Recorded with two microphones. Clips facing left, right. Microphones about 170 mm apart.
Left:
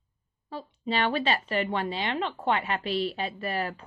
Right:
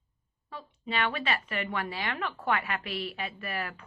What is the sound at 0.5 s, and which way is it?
A woman's voice, 30° left (ahead or behind).